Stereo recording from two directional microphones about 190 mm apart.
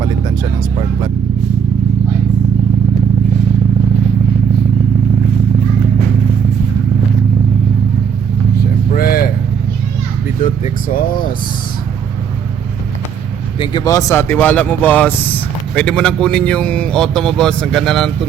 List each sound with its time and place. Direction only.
8.9 s vehicle: 50° left (ahead or behind)
10.4 s vehicle: 45° left (ahead or behind)
13.6 s speech: 20° left (ahead or behind); by 18.1 s centre (ahead or behind)